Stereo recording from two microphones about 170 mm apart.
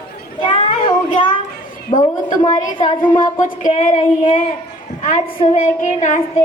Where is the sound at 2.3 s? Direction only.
25° left (ahead or behind).